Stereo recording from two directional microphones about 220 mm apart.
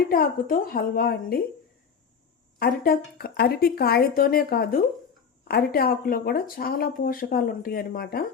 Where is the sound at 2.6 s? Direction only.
45° left (ahead or behind).